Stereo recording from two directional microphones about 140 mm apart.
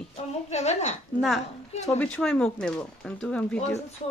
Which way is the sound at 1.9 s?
10° left (ahead or behind).